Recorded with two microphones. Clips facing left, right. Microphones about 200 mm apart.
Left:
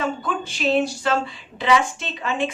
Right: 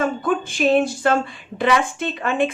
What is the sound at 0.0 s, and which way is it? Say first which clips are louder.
Speech: right 5 dB; 50° right (ahead or behind).